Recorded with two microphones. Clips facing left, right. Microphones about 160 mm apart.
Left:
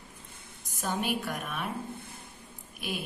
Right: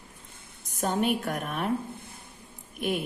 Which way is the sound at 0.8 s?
55° right (ahead or behind).